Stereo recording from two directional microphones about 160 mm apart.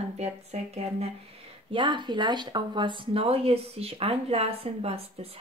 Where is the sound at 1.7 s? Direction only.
30° right (ahead or behind).